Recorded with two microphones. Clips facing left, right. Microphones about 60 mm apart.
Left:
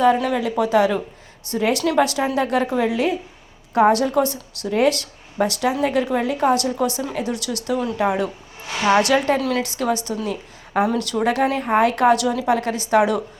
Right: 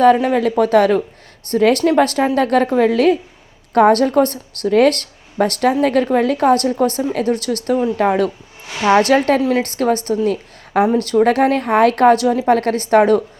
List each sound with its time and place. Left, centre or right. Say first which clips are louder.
0.0 s a woman's voice: right 5 dB; right
7.1 s speech: right 7 dB; right
7.3 s a woman's voice: right 6 dB; right
9.0 s a woman's voice: right 4 dB; right
9.6 s a woman's voice: right 5 dB; right
12.1 s a woman's voice: right 5 dB; right